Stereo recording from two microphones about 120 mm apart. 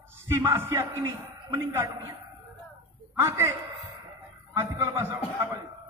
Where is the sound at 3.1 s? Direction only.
20° right (ahead or behind).